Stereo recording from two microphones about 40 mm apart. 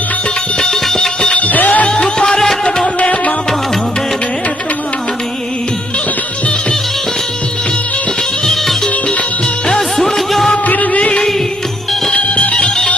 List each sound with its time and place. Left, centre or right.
0.6 s music: centre
1.4 s music: left
2.0 s music: centre
3.0 s music: left
10.0 s music: centre
10.7 s music: left
12.1 s music: left